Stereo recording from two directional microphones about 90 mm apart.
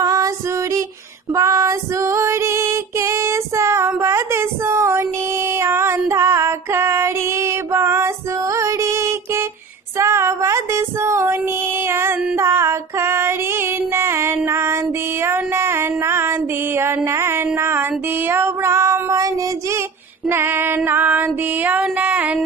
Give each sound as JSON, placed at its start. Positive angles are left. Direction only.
{"t": 0.0, "sound": "female singing", "side_deg": -40}
{"t": 1.3, "sound": "female singing", "side_deg": -35}
{"t": 11.9, "sound": "child singing", "side_deg": -30}
{"t": 12.4, "sound": "female singing", "side_deg": -30}
{"t": 15.2, "sound": "music", "side_deg": -25}
{"t": 17.6, "sound": "female singing", "side_deg": -25}
{"t": 20.2, "sound": "female singing", "side_deg": -25}